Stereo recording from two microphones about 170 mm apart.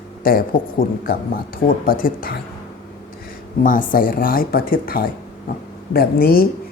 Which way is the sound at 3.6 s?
55° left (ahead or behind).